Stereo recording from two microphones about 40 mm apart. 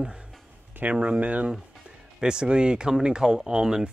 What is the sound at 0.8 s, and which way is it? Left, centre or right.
Speech, right.